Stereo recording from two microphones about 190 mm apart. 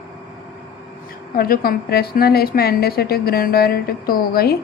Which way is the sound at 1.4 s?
50° left (ahead or behind).